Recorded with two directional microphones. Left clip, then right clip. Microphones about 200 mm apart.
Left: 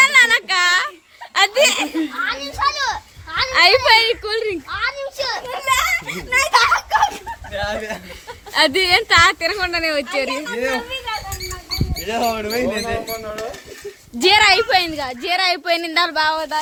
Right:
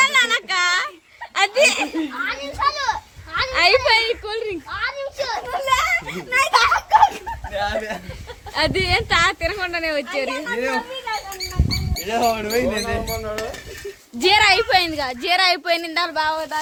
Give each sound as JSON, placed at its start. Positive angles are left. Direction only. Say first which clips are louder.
{"t": 0.0, "sound": "a sound", "louder": "left 4 dB", "side_deg": 20}
{"t": 1.3, "sound": "snicker", "louder": "left 2 dB", "side_deg": 20}
{"t": 2.2, "sound": "children playing", "louder": "left 1 dB", "side_deg": 55}
{"t": 3.5, "sound": "a sound", "louder": "left 4 dB", "side_deg": 20}
{"t": 4.7, "sound": "a sound", "louder": "left 2 dB", "side_deg": 55}
{"t": 5.5, "sound": "giggle", "louder": "left 1 dB", "side_deg": 5}
{"t": 8.5, "sound": "a woman's voice", "louder": "left 5 dB", "side_deg": 30}
{"t": 10.5, "sound": "speech", "louder": "even", "side_deg": 0}
{"t": 11.9, "sound": "speech", "louder": "right 1 dB", "side_deg": 0}
{"t": 14.2, "sound": "a woman's voice", "louder": "left 2 dB", "side_deg": 20}
{"t": 14.7, "sound": "speech", "louder": "left 1 dB", "side_deg": 5}
{"t": 15.8, "sound": "a sound", "louder": "left 4 dB", "side_deg": 35}